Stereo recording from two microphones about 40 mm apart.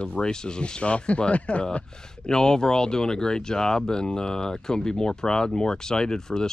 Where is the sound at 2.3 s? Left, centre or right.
Centre.